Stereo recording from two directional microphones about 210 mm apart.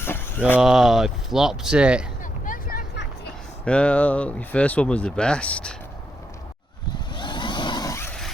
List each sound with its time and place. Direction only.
0.0 s a sound: 10° left (ahead or behind)
0.6 s speech: centre (ahead or behind)
2.2 s vehicle: 40° left (ahead or behind)
3.7 s speech: 5° left (ahead or behind)
7.1 s vehicle: 20° left (ahead or behind)